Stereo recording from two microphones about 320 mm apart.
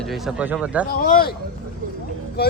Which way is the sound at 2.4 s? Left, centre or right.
Left.